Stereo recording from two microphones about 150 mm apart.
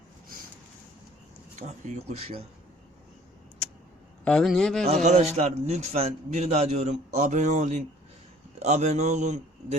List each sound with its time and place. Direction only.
1.5 s a man's voice: 50° right (ahead or behind)
4.2 s a man's voice: 5° left (ahead or behind)
5.0 s a man's voice: 45° right (ahead or behind)